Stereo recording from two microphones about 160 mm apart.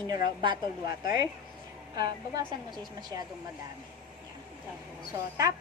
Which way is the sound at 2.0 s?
25° right (ahead or behind).